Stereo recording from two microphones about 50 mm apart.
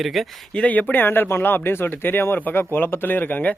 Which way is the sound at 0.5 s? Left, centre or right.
Left.